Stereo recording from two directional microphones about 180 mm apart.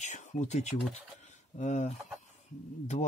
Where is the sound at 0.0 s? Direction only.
40° left (ahead or behind).